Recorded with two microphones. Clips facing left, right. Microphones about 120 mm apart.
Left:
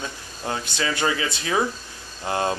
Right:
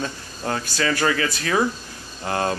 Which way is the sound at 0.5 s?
20° left (ahead or behind).